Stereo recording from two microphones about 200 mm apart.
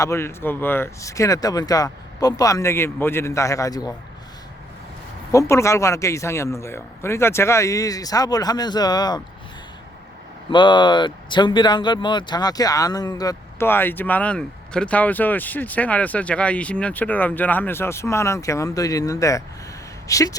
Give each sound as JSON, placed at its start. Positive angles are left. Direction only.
{"t": 0.0, "sound": "speech", "side_deg": 15}
{"t": 5.3, "sound": "speech", "side_deg": 15}
{"t": 10.5, "sound": "speech", "side_deg": 25}